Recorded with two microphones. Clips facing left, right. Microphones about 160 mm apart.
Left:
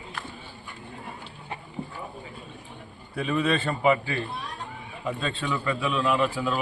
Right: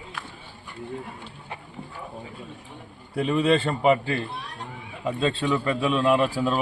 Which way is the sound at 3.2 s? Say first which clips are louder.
Right 4 dB; 30° right (ahead or behind).